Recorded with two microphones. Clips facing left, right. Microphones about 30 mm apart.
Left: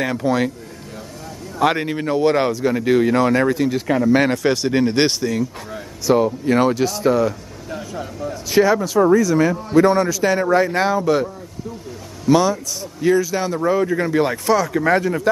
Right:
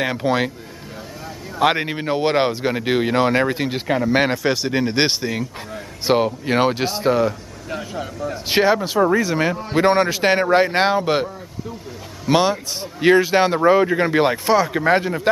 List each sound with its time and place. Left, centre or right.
0.0 s speech: right
1.6 s speech: right
3.8 s speech: right
4.4 s speech: centre
5.2 s speech: right
6.0 s speech: right; by 8.1 s centre
8.5 s speech: right
12.3 s speech: right
13.6 s speech: right